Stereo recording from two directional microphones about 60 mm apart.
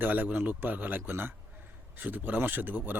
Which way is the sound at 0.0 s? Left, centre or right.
Right.